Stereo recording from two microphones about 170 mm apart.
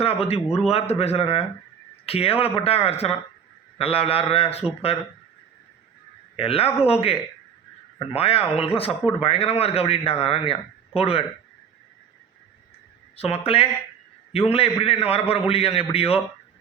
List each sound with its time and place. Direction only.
0.0 s speech: 35° left (ahead or behind)
6.3 s speech: 35° left (ahead or behind)
13.1 s speech: 35° left (ahead or behind)